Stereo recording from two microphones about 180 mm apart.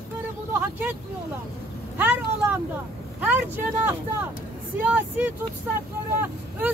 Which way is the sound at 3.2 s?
10° right (ahead or behind).